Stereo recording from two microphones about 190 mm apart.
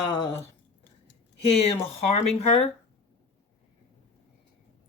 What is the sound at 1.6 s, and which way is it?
Speech, 35° left (ahead or behind).